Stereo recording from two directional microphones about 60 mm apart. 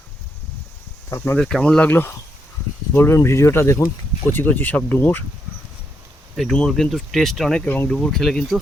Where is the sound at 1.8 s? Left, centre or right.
Left.